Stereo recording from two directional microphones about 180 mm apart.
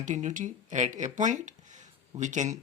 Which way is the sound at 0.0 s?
45° right (ahead or behind).